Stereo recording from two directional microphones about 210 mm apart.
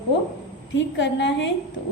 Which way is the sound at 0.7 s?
60° left (ahead or behind).